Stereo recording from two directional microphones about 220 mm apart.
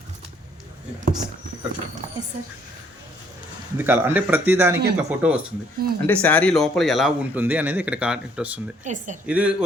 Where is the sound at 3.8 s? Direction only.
10° right (ahead or behind).